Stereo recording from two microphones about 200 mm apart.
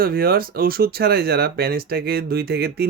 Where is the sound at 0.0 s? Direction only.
50° right (ahead or behind).